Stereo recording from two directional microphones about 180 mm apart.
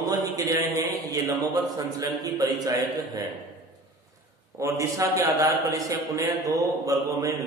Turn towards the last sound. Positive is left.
turn(degrees=-20)  # may be behind; listen again after turning